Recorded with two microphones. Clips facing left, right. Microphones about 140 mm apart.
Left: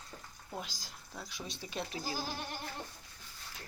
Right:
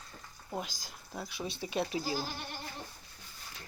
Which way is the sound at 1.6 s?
10° right (ahead or behind).